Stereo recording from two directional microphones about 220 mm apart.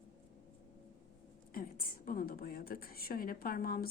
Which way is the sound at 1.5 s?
40° left (ahead or behind).